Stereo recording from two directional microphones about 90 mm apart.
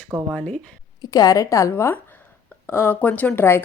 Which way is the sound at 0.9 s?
45° left (ahead or behind).